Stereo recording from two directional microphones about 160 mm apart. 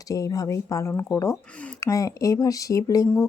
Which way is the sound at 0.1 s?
20° left (ahead or behind).